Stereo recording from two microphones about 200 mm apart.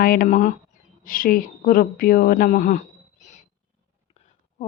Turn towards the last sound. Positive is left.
turn(degrees=35)  # may be behind; listen again after turning